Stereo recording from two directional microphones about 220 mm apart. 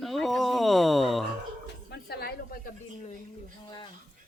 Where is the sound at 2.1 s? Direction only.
45° left (ahead or behind).